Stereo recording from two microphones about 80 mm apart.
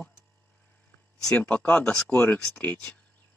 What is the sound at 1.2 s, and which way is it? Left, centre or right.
Speech, centre.